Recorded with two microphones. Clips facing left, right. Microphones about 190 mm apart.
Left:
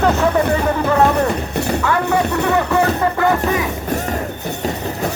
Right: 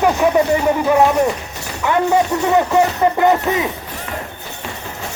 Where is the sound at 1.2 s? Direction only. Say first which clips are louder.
Left 3 dB; 60° left (ahead or behind).